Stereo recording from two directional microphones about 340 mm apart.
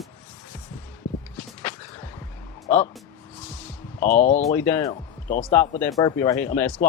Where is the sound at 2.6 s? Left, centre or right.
Left.